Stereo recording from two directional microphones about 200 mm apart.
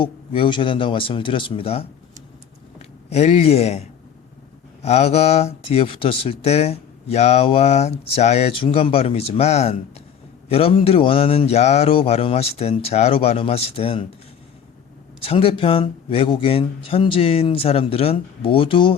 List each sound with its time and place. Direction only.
0.0 s a man's voice: 25° left (ahead or behind)
15.2 s a man's voice: 30° left (ahead or behind)